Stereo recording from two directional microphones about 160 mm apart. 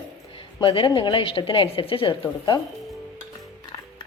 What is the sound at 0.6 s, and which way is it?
A woman's voice, 35° left (ahead or behind).